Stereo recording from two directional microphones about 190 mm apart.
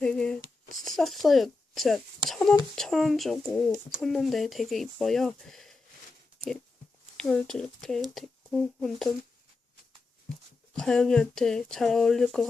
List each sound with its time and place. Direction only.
0.0 s a sound: 5° left (ahead or behind)
0.9 s speech: centre (ahead or behind)
3.4 s speech: 15° left (ahead or behind)
4.0 s speech: centre (ahead or behind)
7.2 s speech: 5° left (ahead or behind)
10.8 s speech: 5° left (ahead or behind)